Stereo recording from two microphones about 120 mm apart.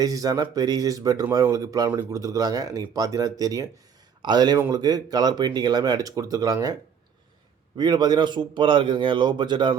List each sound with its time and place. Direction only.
0.0 s speech: 30° right (ahead or behind)
7.8 s speech: 35° right (ahead or behind)